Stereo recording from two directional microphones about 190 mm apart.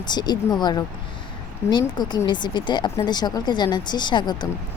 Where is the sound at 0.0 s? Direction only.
20° left (ahead or behind).